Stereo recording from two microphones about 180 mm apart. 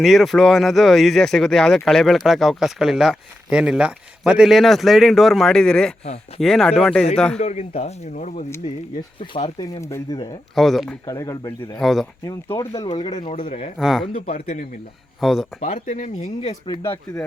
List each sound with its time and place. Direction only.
0.0 s speech: centre (ahead or behind)
7.3 s speech: 35° left (ahead or behind)
9.3 s speech: 25° left (ahead or behind)
10.5 s speech: centre (ahead or behind)
11.0 s speech: 20° left (ahead or behind)
11.8 s speech: centre (ahead or behind)
12.2 s speech: 15° left (ahead or behind)
13.4 s speech: 40° left (ahead or behind)
13.7 s speech: centre (ahead or behind)
14.3 s speech: 40° left (ahead or behind)
15.2 s speech: centre (ahead or behind)
15.6 s speech: 45° left (ahead or behind)
16.8 s speech: 15° left (ahead or behind)